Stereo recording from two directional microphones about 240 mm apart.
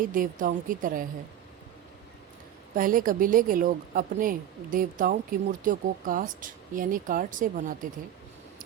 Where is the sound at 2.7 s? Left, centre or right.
Right.